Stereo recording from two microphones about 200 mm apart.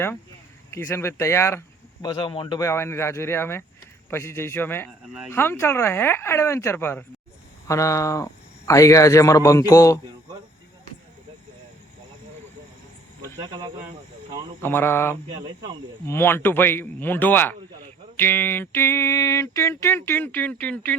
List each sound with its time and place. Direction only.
0.7 s speech: 15° left (ahead or behind)
5.0 s speech: 5° right (ahead or behind)
5.3 s speech: 10° left (ahead or behind)
13.4 s speech: 25° right (ahead or behind)
14.6 s speech: 10° left (ahead or behind)